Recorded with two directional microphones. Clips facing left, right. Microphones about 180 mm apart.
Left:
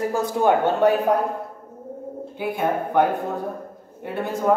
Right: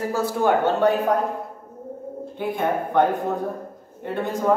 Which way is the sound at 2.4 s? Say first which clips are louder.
Even; 10° left (ahead or behind).